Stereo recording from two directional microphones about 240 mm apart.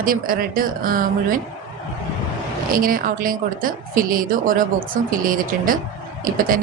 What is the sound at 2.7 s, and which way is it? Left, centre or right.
Speech, right.